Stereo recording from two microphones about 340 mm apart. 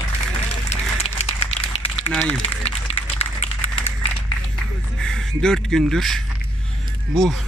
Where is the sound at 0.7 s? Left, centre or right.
Centre.